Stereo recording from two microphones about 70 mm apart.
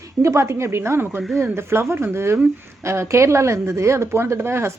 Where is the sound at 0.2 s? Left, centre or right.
Right.